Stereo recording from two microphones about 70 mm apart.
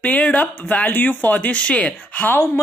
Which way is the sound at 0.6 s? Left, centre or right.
Left.